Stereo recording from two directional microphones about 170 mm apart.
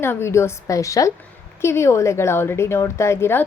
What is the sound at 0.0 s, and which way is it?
Speech, 15° left (ahead or behind).